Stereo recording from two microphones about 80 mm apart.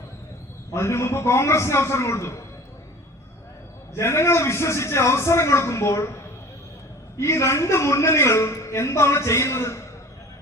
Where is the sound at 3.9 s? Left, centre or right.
Left.